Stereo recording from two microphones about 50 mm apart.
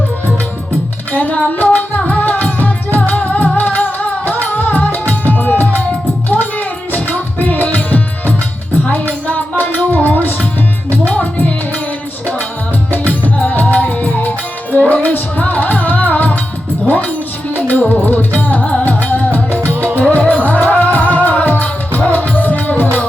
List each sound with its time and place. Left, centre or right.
1.1 s music: left
6.9 s music: left
13.6 s music: left